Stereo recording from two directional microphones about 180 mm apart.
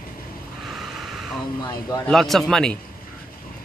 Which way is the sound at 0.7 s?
Centre (ahead or behind).